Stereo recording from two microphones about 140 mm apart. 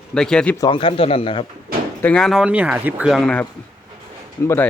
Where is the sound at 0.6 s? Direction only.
35° left (ahead or behind).